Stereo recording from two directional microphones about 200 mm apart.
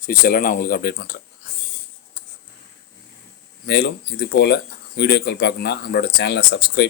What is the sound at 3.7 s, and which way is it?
Speech, 60° left (ahead or behind).